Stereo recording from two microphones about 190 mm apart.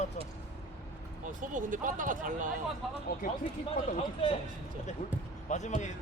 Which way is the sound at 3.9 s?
30° left (ahead or behind).